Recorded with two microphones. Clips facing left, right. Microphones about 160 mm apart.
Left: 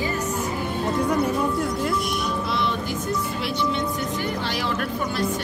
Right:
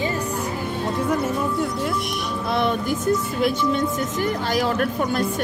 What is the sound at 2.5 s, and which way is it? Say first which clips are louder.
Music: right 4 dB; 50° right (ahead or behind).